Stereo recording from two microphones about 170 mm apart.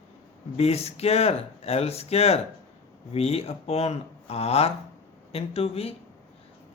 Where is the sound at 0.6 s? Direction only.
35° left (ahead or behind).